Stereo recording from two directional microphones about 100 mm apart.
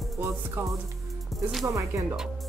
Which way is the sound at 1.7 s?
30° right (ahead or behind).